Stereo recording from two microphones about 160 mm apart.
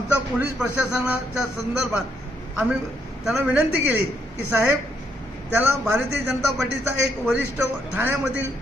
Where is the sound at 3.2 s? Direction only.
5° right (ahead or behind).